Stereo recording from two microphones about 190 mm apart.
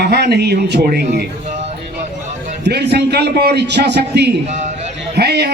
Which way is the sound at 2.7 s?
60° right (ahead or behind).